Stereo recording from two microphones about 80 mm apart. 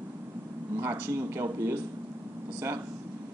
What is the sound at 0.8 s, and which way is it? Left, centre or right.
Speech, right.